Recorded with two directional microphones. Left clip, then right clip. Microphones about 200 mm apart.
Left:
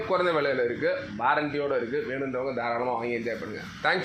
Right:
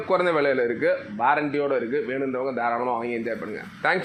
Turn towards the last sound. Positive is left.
turn(degrees=-30)  # may be behind; listen again after turning